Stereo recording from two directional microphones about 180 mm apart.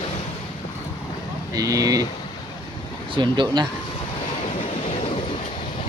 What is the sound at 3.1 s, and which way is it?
Speech, 25° right (ahead or behind).